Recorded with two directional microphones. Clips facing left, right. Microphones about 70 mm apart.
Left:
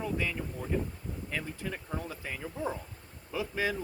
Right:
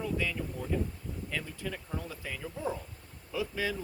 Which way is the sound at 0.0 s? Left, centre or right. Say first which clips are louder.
Even; left.